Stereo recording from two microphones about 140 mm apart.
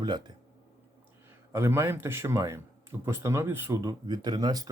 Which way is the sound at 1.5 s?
20° right (ahead or behind).